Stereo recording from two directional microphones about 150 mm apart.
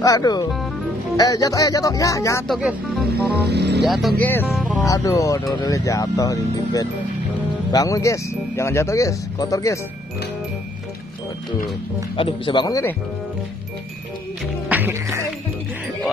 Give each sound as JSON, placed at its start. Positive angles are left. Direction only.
{"t": 0.0, "sound": "speech", "side_deg": 25}
{"t": 2.4, "sound": "speech", "side_deg": 0}
{"t": 3.4, "sound": "speech", "side_deg": -90}
{"t": 3.8, "sound": "speech", "side_deg": 0}
{"t": 4.2, "sound": "speech", "side_deg": 15}
{"t": 12.2, "sound": "speech", "side_deg": 35}
{"t": 14.7, "sound": "speech", "side_deg": -15}